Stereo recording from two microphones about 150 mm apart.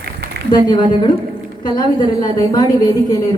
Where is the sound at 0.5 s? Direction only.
30° left (ahead or behind).